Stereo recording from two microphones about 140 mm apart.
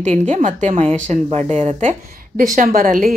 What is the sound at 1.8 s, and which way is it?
A woman's voice, 75° right (ahead or behind).